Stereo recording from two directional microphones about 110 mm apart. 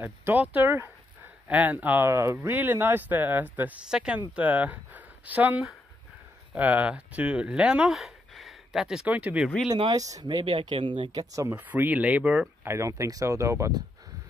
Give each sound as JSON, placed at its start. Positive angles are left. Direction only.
{"t": 0.0, "sound": "speech", "side_deg": -20}
{"t": 2.0, "sound": "speech", "side_deg": -25}
{"t": 9.8, "sound": "speech", "side_deg": -35}
{"t": 10.2, "sound": "speech", "side_deg": -50}
{"t": 11.5, "sound": "speech", "side_deg": -15}
{"t": 12.7, "sound": "speech", "side_deg": -30}